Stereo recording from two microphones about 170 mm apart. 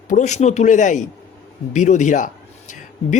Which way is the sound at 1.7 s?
45° left (ahead or behind).